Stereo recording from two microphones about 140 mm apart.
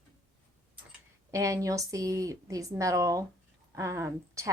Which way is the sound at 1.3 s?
20° right (ahead or behind).